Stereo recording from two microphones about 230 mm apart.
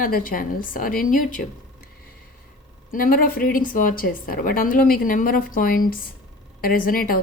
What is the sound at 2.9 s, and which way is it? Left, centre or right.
A woman's voice, left.